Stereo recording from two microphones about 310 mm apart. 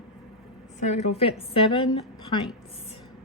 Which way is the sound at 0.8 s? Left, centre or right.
Left.